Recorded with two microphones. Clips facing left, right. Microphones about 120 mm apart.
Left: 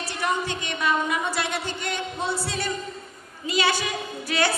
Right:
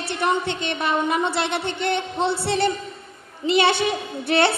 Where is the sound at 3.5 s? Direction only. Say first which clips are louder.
Right 6 dB; 25° right (ahead or behind).